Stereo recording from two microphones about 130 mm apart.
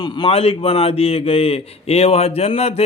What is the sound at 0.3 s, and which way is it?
Speech, 50° left (ahead or behind).